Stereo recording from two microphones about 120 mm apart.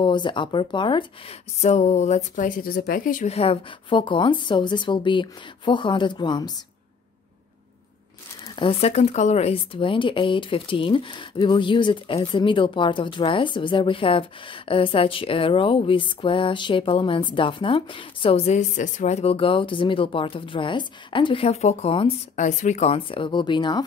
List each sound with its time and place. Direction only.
0.0 s speech: 40° left (ahead or behind)
1.6 s speech: 75° left (ahead or behind); by 6.5 s 35° left (ahead or behind)
8.5 s speech: 50° left (ahead or behind)
8.9 s speech: 70° left (ahead or behind); by 22.1 s 55° left (ahead or behind)
22.3 s speech: 90° left
22.8 s speech: 50° left (ahead or behind)